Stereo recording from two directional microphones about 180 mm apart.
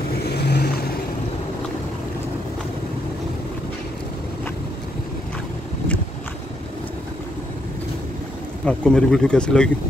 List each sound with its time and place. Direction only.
0.2 s vehicle: 65° left (ahead or behind)
8.6 s speech: 5° left (ahead or behind)